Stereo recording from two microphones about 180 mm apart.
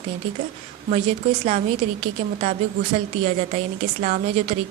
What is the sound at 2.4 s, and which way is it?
A woman's voice, 40° right (ahead or behind).